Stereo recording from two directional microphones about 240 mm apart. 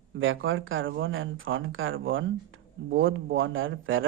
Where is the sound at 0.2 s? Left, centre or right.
Right.